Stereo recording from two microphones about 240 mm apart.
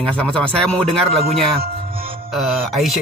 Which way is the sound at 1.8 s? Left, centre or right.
Right.